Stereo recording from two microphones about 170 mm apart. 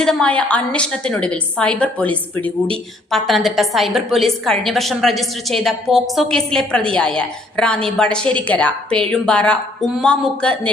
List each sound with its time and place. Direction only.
0.0 s a woman's voice: 5° left (ahead or behind)